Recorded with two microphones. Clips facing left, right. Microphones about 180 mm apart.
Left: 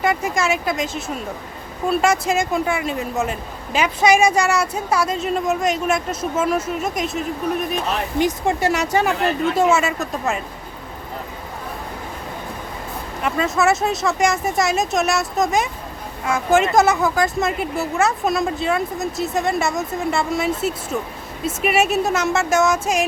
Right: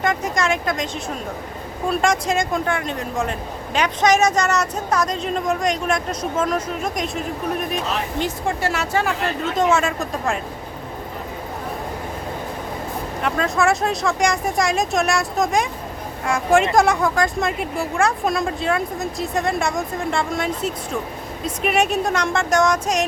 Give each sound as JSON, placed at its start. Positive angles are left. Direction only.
{"t": 0.0, "sound": "a woman's voice", "side_deg": 5}
{"t": 8.2, "sound": "a woman's voice", "side_deg": 20}
{"t": 9.6, "sound": "speech", "side_deg": 5}
{"t": 13.2, "sound": "a woman's voice", "side_deg": 5}